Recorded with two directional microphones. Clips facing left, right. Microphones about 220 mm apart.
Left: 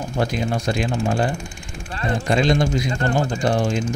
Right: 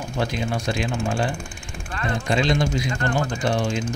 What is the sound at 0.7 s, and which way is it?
Speech, 45° left (ahead or behind).